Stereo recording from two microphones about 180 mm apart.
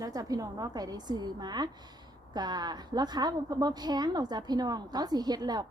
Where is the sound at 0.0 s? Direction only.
20° right (ahead or behind).